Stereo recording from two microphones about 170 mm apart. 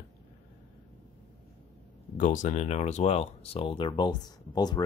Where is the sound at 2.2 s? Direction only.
50° left (ahead or behind).